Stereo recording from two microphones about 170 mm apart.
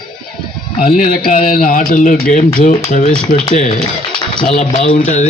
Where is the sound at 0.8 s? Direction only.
50° left (ahead or behind).